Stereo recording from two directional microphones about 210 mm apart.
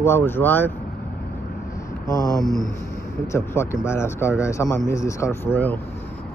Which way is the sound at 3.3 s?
15° left (ahead or behind).